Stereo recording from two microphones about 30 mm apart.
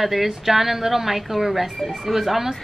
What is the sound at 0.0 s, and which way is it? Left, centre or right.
A woman's voice, centre.